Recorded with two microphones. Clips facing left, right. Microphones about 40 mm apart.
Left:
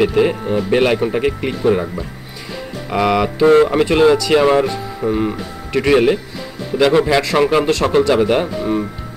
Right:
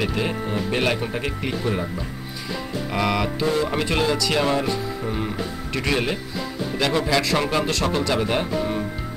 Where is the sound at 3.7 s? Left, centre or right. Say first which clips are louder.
Left 10 dB; centre.